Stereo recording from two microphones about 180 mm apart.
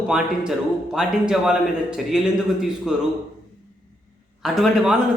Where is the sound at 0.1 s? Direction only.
5° right (ahead or behind).